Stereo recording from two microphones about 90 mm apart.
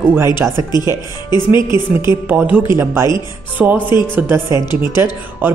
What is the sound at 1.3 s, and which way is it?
Speech, 55° left (ahead or behind).